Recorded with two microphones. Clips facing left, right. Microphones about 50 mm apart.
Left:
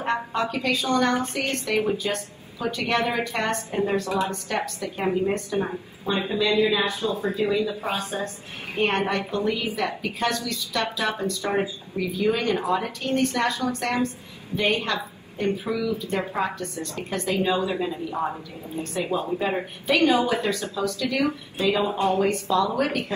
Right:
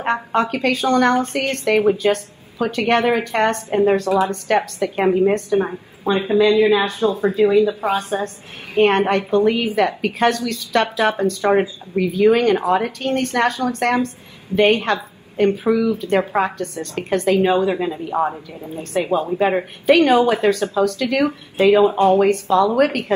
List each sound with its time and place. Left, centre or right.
0.0 s a woman's voice: right